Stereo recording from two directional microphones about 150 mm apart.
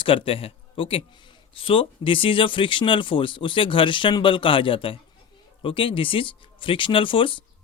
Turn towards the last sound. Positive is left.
turn(degrees=35)  # may be behind; listen again after turning